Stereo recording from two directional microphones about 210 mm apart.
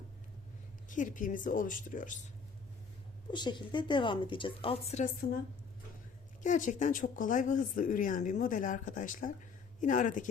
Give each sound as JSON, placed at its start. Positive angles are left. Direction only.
{"t": 0.9, "sound": "speech", "side_deg": 40}
{"t": 3.3, "sound": "a woman's voice", "side_deg": 20}
{"t": 6.4, "sound": "speech", "side_deg": 35}